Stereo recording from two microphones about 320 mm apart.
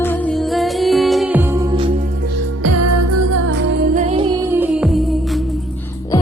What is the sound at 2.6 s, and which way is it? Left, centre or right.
Music, right.